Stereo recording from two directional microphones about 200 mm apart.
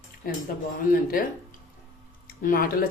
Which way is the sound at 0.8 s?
45° left (ahead or behind).